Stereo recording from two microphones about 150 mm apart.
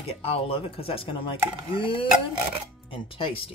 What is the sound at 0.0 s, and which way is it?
Speech, 40° left (ahead or behind).